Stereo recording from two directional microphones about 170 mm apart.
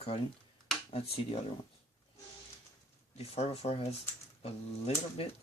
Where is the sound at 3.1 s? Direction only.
35° left (ahead or behind).